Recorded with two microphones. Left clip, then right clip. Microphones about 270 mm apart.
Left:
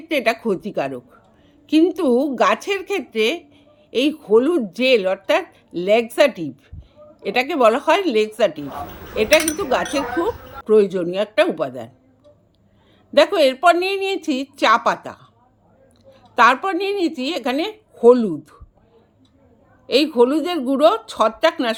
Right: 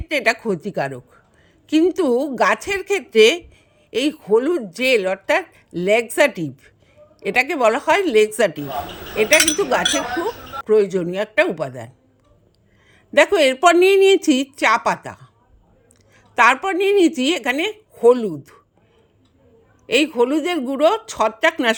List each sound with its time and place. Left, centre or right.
0.1 s speech: right
13.1 s speech: right
16.3 s a woman's voice: right
19.9 s speech: right